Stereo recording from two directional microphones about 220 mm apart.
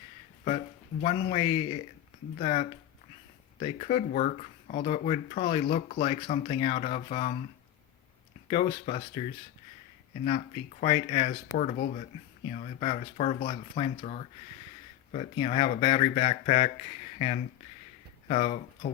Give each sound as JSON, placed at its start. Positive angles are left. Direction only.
{"t": 1.0, "sound": "speech", "side_deg": 25}
{"t": 8.4, "sound": "speech", "side_deg": 25}
{"t": 10.2, "sound": "speech", "side_deg": 30}